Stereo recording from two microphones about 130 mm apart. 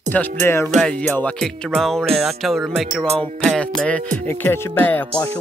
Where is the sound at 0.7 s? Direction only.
Centre (ahead or behind).